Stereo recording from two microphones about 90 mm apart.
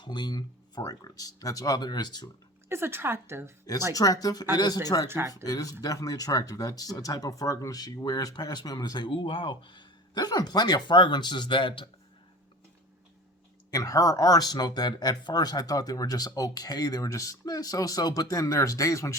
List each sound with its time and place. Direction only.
0.0 s speech: 55° left (ahead or behind)
0.9 s speech: 40° left (ahead or behind)
2.6 s speech: 25° right (ahead or behind)
3.9 s speech: 40° left (ahead or behind)
5.0 s speech: 25° right (ahead or behind)
5.5 s speech: 45° left (ahead or behind); by 11.9 s 65° left (ahead or behind)
13.7 s speech: 40° left (ahead or behind)